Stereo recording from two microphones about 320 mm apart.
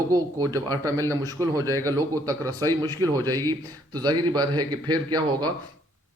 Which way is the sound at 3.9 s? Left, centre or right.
Centre.